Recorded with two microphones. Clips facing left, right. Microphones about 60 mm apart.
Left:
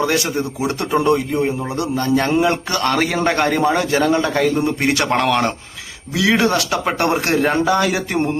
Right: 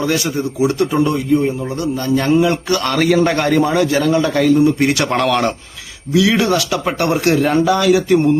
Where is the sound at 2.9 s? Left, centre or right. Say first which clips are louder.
Right 4 dB; centre.